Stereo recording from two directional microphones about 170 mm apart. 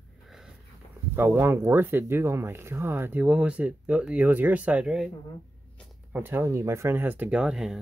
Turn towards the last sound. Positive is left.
turn(degrees=-5)  # may be behind; listen again after turning